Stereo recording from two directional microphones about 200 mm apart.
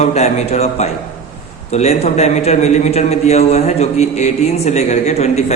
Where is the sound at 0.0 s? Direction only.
35° left (ahead or behind).